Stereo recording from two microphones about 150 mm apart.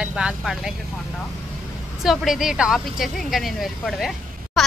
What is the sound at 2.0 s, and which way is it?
Speech, centre (ahead or behind).